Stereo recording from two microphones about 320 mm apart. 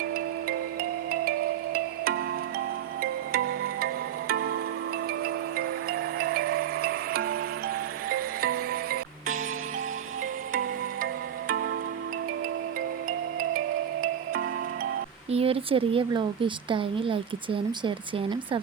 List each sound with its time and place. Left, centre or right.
1.7 s music: right
11.0 s music: right
15.3 s speech: centre